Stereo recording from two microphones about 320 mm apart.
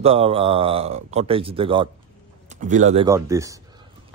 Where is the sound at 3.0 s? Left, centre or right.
Centre.